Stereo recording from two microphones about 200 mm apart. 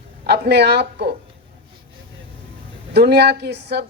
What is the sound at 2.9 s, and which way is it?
Speech, 55° right (ahead or behind).